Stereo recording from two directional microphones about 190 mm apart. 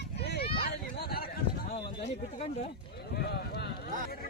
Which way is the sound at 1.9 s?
30° left (ahead or behind).